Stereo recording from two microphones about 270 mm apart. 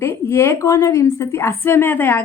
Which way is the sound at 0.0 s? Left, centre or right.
Centre.